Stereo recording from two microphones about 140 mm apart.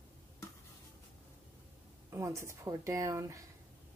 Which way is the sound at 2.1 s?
20° right (ahead or behind).